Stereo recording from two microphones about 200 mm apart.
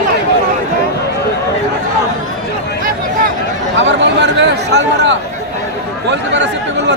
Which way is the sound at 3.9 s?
60° right (ahead or behind).